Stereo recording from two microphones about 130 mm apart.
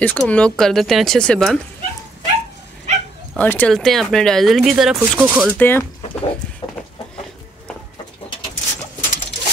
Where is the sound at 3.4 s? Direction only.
15° left (ahead or behind).